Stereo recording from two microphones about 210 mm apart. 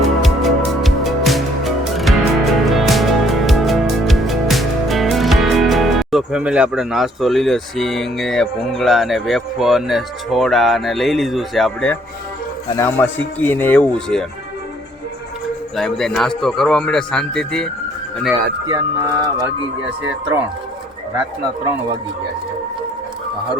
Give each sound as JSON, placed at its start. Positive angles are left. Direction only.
{"t": 0.0, "sound": "music", "side_deg": 0}
{"t": 12.7, "sound": "speech", "side_deg": 10}
{"t": 15.7, "sound": "speech", "side_deg": 0}
{"t": 18.7, "sound": "speech", "side_deg": -15}